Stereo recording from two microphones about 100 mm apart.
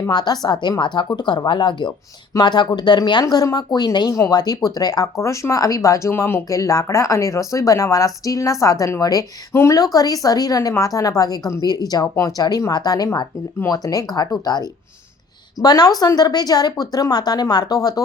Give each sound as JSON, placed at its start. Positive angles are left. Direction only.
{"t": 0.1, "sound": "a woman's voice", "side_deg": 45}